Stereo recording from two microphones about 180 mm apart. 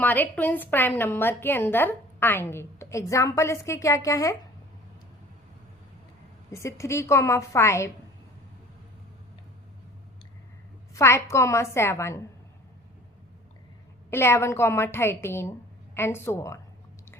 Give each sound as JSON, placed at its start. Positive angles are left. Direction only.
{"t": 0.0, "sound": "a woman's voice", "side_deg": 10}
{"t": 6.5, "sound": "a woman's voice", "side_deg": 15}
{"t": 10.9, "sound": "a woman's voice", "side_deg": 15}
{"t": 14.1, "sound": "a woman's voice", "side_deg": 15}